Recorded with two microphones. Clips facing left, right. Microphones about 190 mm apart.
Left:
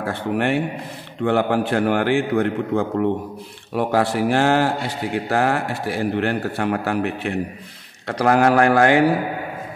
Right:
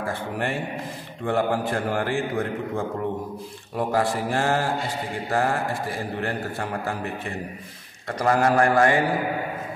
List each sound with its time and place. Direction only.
0.0 s speech: 70° left (ahead or behind)